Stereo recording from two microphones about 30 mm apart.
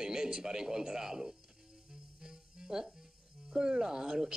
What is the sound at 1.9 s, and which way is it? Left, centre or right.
Music, centre.